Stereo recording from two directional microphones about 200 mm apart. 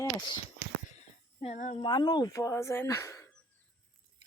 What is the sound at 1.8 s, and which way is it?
Speech, 20° left (ahead or behind).